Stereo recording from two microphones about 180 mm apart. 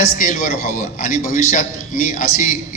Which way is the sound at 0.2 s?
45° left (ahead or behind).